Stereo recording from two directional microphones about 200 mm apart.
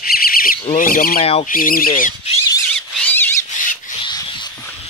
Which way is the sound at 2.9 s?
10° left (ahead or behind).